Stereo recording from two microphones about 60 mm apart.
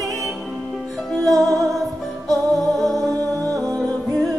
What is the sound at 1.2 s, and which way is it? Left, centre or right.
Music, right.